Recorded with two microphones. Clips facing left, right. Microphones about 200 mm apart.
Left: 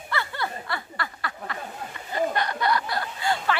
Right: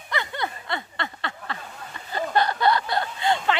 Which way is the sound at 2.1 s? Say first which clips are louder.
Right 2 dB; 30° right (ahead or behind).